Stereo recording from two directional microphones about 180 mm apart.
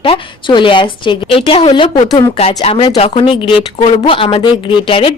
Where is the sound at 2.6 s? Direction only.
30° left (ahead or behind).